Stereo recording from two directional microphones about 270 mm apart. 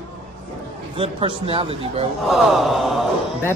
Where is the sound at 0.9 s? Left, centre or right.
Centre.